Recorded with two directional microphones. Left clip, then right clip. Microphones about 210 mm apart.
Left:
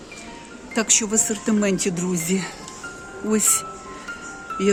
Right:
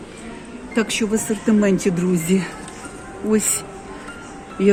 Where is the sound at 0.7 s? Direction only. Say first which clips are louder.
Even; 10° left (ahead or behind).